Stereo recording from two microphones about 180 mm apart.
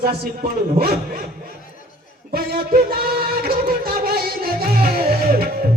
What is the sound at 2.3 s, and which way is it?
Music, 55° right (ahead or behind).